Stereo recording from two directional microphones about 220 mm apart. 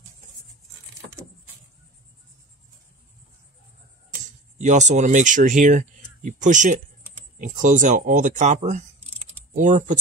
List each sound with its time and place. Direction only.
4.1 s speech: 35° right (ahead or behind)